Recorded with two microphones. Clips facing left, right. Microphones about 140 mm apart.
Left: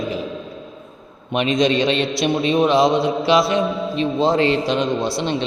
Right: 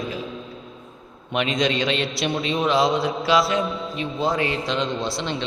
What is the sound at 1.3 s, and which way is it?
A man's voice, 20° left (ahead or behind).